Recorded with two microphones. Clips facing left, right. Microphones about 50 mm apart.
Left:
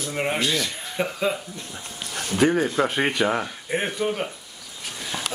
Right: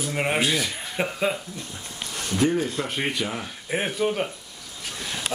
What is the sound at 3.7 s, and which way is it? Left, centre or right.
Speech, centre.